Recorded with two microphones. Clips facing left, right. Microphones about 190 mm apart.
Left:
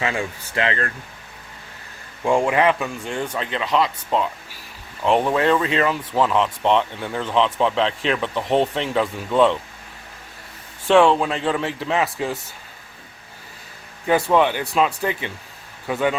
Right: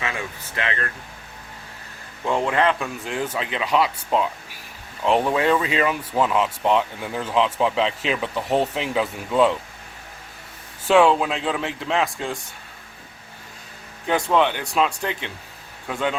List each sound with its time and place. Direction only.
0.0 s speech: 30° left (ahead or behind)
2.2 s speech: 10° left (ahead or behind)
10.8 s speech: 5° right (ahead or behind)
14.1 s speech: 5° left (ahead or behind)